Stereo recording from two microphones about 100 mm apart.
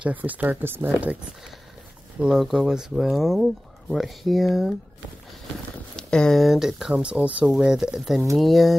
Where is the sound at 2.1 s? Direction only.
5° right (ahead or behind).